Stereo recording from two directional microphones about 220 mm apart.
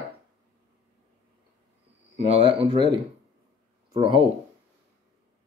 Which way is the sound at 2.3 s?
25° right (ahead or behind).